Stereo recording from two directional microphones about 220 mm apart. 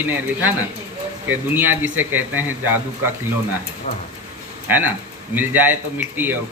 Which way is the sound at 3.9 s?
30° left (ahead or behind).